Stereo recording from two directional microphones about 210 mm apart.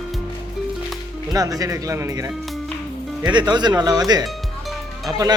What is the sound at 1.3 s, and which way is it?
Speech, 15° right (ahead or behind).